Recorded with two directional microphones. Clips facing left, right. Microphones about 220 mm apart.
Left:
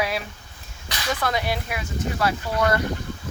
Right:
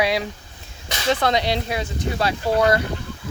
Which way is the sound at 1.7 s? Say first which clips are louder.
Right 3 dB; 30° right (ahead or behind).